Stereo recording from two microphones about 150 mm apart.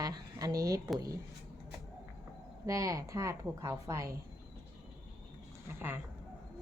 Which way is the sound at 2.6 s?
20° right (ahead or behind).